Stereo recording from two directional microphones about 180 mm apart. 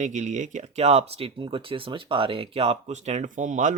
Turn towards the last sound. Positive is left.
turn(degrees=-45)  # may be behind; listen again after turning